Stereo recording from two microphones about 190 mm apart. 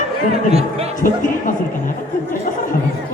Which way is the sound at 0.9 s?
45° left (ahead or behind).